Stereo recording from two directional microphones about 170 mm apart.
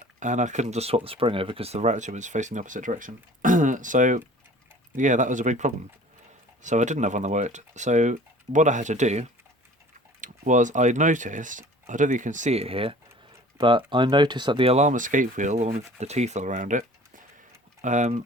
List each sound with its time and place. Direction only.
0.2 s speech: 45° right (ahead or behind)
17.8 s speech: 45° right (ahead or behind)